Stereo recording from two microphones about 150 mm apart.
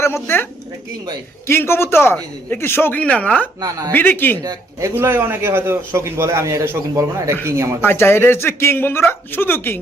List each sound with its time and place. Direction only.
0.0 s speech: 15° left (ahead or behind)
1.5 s speech: 15° left (ahead or behind)
4.4 s speech: 15° right (ahead or behind)
7.8 s speech: 15° left (ahead or behind)